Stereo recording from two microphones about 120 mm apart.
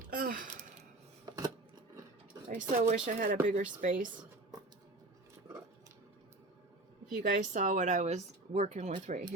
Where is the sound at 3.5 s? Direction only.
90° right.